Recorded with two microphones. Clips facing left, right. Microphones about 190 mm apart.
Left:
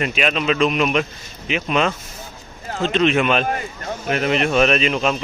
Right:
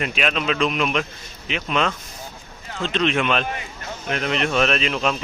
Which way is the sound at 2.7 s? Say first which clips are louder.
Left 5 dB; 40° left (ahead or behind).